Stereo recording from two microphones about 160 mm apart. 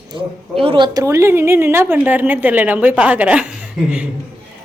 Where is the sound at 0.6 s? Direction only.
30° right (ahead or behind); by 3.5 s 10° right (ahead or behind).